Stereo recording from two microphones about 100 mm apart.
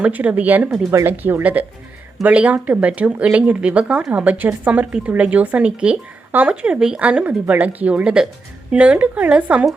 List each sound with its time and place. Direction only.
0.0 s speech: 15° right (ahead or behind)